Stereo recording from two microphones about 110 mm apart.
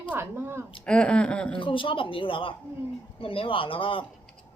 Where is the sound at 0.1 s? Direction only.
20° right (ahead or behind).